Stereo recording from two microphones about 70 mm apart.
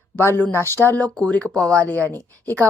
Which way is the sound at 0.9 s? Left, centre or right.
Centre.